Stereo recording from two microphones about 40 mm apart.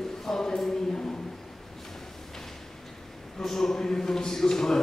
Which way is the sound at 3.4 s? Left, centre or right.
Centre.